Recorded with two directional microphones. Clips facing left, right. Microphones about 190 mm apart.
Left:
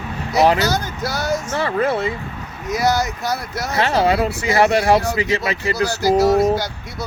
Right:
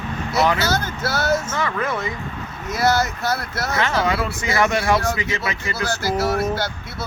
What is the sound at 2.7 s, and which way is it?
Speech, 15° left (ahead or behind).